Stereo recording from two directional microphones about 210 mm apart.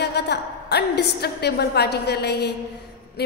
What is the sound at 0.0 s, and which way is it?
A woman's voice, 50° left (ahead or behind).